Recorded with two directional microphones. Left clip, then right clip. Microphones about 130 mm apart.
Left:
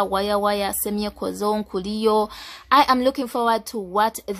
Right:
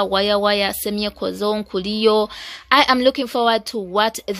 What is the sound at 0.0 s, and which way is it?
A woman's voice, 15° right (ahead or behind).